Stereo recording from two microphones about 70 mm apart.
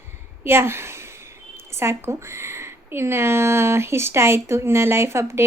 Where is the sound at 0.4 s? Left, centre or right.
Right.